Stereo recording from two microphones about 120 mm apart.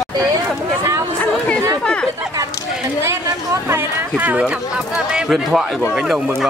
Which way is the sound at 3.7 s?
15° right (ahead or behind).